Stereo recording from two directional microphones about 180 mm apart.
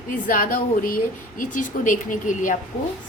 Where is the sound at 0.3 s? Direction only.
50° left (ahead or behind).